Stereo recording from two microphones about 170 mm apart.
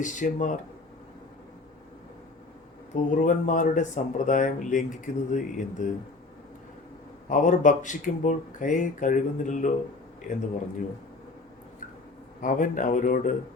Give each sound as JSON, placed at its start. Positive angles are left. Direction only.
{"t": 0.0, "sound": "speech", "side_deg": 50}
{"t": 2.9, "sound": "speech", "side_deg": 50}
{"t": 7.3, "sound": "speech", "side_deg": 50}
{"t": 12.4, "sound": "speech", "side_deg": 50}